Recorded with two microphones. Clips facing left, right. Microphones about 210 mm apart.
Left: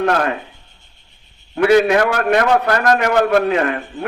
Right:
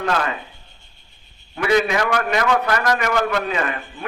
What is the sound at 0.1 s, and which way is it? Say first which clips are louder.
Speech: left 5 dB; 50° left (ahead or behind).